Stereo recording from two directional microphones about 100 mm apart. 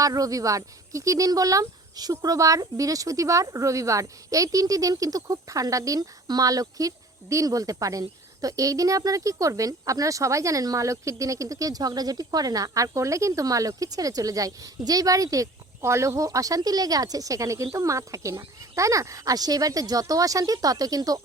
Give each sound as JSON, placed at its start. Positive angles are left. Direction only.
{"t": 0.0, "sound": "speech", "side_deg": -35}